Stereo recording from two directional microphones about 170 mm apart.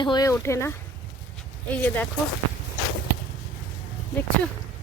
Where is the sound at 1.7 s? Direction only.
10° left (ahead or behind).